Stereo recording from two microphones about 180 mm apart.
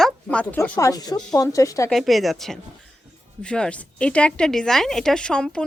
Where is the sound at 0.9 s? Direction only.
20° left (ahead or behind).